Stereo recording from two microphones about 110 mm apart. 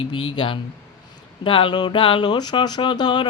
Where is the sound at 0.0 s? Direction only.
50° left (ahead or behind).